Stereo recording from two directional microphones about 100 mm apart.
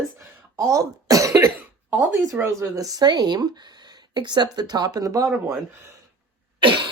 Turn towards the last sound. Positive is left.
turn(degrees=-55)  # may be behind; listen again after turning